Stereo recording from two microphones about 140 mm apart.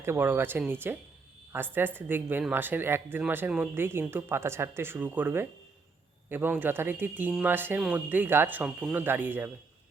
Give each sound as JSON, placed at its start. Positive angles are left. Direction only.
{"t": 0.0, "sound": "speech", "side_deg": -15}